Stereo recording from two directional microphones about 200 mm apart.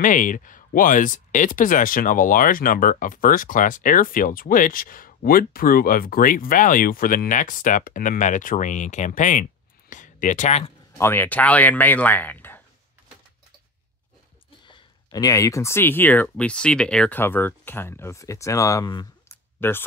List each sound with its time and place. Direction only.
0.0 s speech: 40° left (ahead or behind)
11.0 s speech: 10° left (ahead or behind)
14.7 s speech: 20° left (ahead or behind)